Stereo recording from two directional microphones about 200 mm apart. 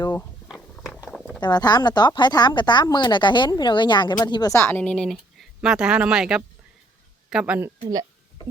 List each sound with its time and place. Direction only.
0.0 s speech: 20° left (ahead or behind)
0.4 s a sound: centre (ahead or behind)
1.4 s speech: 20° left (ahead or behind); by 7.7 s 5° right (ahead or behind)